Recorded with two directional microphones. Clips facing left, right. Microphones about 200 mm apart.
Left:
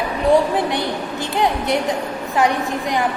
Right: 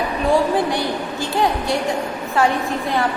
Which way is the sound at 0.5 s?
20° left (ahead or behind).